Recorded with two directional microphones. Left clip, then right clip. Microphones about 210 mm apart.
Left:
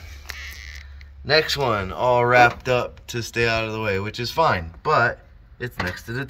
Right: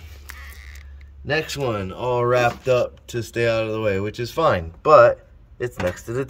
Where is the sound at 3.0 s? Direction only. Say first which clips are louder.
Right 1 dB; 5° right (ahead or behind).